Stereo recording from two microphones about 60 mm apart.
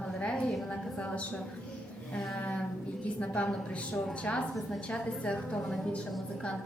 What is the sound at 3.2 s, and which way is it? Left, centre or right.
A woman's voice, left.